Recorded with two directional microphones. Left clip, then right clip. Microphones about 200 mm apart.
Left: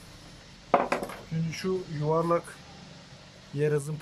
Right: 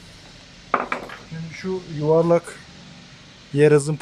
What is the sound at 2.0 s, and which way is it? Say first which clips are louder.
Speech: right 10 dB; 20° right (ahead or behind).